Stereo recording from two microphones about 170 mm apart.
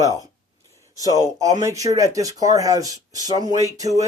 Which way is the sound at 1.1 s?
20° right (ahead or behind).